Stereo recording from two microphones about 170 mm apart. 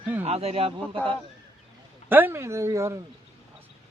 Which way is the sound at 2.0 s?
10° right (ahead or behind).